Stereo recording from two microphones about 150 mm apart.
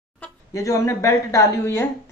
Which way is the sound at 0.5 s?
20° left (ahead or behind).